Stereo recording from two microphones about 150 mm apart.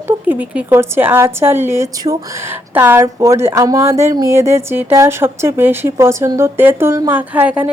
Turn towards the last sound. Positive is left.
turn(degrees=-10)  # may be behind; listen again after turning